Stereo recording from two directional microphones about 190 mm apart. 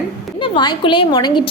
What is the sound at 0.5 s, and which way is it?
Speech, 25° left (ahead or behind).